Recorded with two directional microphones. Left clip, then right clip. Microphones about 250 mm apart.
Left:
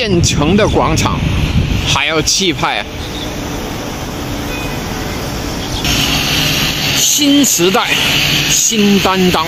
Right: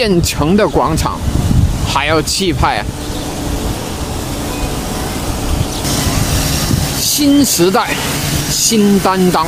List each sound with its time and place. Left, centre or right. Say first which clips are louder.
0.0 s speech: even; centre
7.0 s a sound: left 2 dB; right
7.5 s speech: left 1 dB; centre